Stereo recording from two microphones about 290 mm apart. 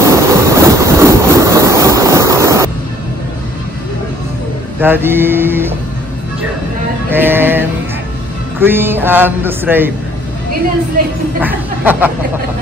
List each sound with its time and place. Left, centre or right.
0.0 s train: centre
4.7 s a man's voice: centre
7.1 s music: centre
8.5 s a man's voice: centre
11.4 s a man's voice: centre